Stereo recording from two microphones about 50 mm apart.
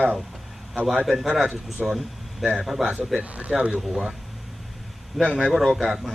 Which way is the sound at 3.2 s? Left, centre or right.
Right.